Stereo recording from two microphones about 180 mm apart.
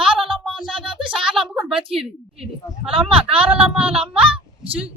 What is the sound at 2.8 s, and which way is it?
Speech, 30° right (ahead or behind).